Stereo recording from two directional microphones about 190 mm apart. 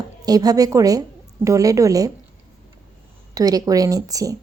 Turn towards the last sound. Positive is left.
turn(degrees=-20)  # may be behind; listen again after turning